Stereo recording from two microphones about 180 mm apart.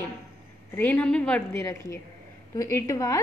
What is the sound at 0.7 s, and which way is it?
A woman's voice, 10° left (ahead or behind).